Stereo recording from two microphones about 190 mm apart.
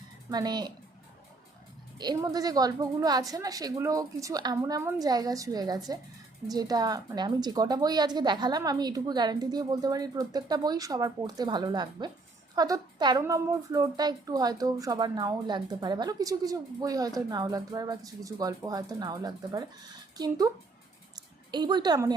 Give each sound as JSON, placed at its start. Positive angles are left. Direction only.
{"t": 0.3, "sound": "a woman's voice", "side_deg": -20}
{"t": 2.0, "sound": "a woman's voice", "side_deg": -20}
{"t": 21.5, "sound": "a woman's voice", "side_deg": -20}